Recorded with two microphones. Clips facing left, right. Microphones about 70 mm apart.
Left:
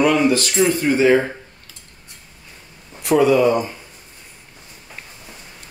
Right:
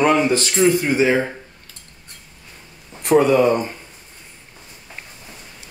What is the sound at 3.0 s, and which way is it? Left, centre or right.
Speech, right.